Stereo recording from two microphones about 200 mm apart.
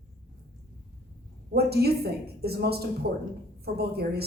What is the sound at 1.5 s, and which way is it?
Speech, 50° right (ahead or behind).